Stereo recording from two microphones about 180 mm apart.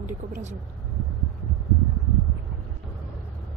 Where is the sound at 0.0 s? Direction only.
45° right (ahead or behind).